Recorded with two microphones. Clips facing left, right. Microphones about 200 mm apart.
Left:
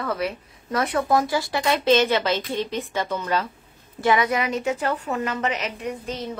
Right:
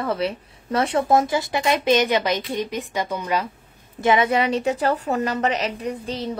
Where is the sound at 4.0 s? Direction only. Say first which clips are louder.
Right 2 dB; 25° right (ahead or behind).